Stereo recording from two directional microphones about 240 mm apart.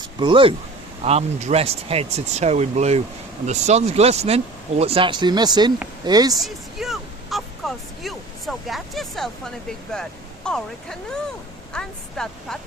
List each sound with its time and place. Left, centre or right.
0.2 s speech: right
6.4 s a sound: centre
8.0 s speech: centre